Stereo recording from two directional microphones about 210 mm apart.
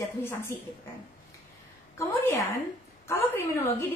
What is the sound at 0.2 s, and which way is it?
Speech, 10° left (ahead or behind).